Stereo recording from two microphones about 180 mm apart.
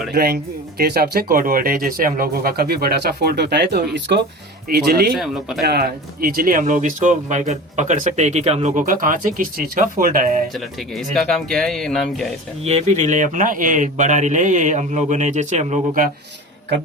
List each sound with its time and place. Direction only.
0.1 s speech: 60° right (ahead or behind)
4.9 s speech: 60° right (ahead or behind)
5.1 s speech: centre (ahead or behind)
5.6 s speech: 60° right (ahead or behind)
10.5 s speech: centre (ahead or behind)
12.6 s speech: 35° right (ahead or behind)